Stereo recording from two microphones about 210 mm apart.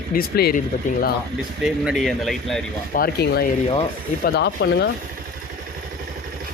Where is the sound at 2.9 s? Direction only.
45° left (ahead or behind).